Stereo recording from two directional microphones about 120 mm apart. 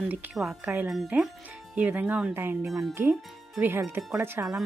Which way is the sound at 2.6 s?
Centre (ahead or behind).